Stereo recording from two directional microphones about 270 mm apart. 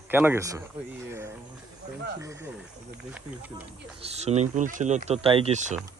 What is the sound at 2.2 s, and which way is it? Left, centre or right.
Snake, centre.